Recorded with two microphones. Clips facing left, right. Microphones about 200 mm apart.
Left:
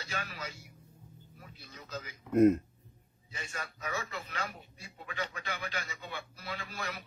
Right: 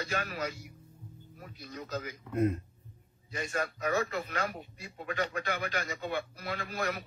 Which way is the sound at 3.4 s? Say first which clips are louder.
Right 9 dB; 60° right (ahead or behind).